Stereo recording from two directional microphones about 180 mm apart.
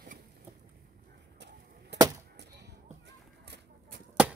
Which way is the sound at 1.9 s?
75° right (ahead or behind).